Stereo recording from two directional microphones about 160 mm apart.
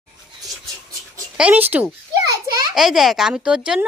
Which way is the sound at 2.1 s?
20° right (ahead or behind).